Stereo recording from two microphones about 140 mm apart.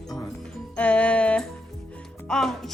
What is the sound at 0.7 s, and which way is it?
Music, 10° left (ahead or behind).